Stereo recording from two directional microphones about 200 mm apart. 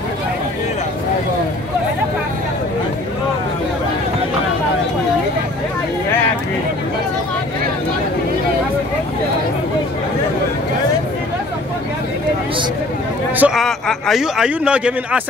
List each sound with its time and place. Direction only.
13.4 s a man's voice: centre (ahead or behind)